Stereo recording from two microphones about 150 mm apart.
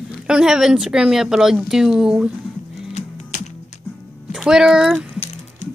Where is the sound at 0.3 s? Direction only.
5° right (ahead or behind).